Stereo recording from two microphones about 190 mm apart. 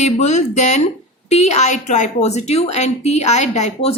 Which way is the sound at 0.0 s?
35° left (ahead or behind).